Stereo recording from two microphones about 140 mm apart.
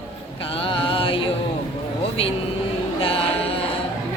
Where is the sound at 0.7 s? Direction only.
40° left (ahead or behind).